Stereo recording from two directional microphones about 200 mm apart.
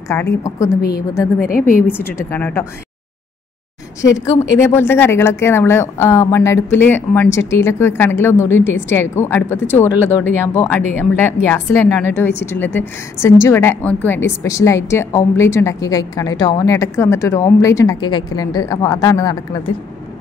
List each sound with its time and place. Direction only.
0.4 s a woman's voice: 15° left (ahead or behind)
1.4 s a woman's voice: 45° left (ahead or behind)
1.9 s a woman's voice: 10° left (ahead or behind)
4.0 s a woman's voice: 15° left (ahead or behind)